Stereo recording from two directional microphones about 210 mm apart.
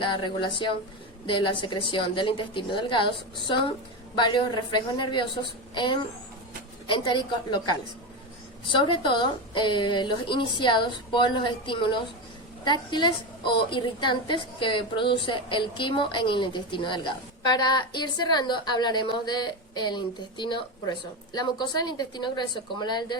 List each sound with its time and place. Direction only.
0.0 s a woman's voice: 20° left (ahead or behind)